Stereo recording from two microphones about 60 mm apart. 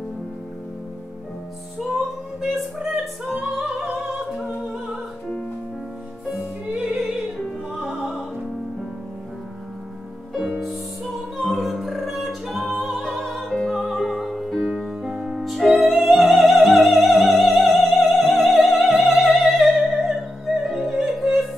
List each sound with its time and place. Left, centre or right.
2.4 s music: centre
3.5 s opera: centre
6.3 s music: centre
7.8 s music: centre
11.3 s music: centre
17.6 s opera: centre
20.8 s yodeling: centre